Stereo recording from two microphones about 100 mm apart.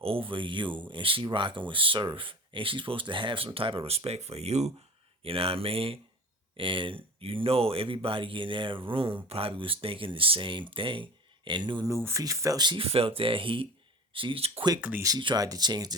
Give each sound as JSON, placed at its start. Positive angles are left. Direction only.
{"t": 0.0, "sound": "speech", "side_deg": -65}
{"t": 5.2, "sound": "speech", "side_deg": -70}
{"t": 6.6, "sound": "speech", "side_deg": -60}
{"t": 11.9, "sound": "speech", "side_deg": -30}
{"t": 12.8, "sound": "speech", "side_deg": -70}
{"t": 14.8, "sound": "speech", "side_deg": -15}
{"t": 15.4, "sound": "speech", "side_deg": -40}